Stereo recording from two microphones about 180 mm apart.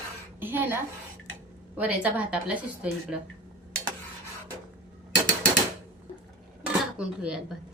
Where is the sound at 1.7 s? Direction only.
5° right (ahead or behind).